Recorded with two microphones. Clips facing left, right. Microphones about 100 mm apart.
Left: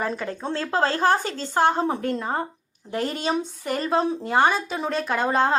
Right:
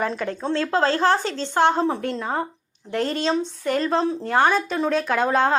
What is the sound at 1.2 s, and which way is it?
Speech, 45° left (ahead or behind).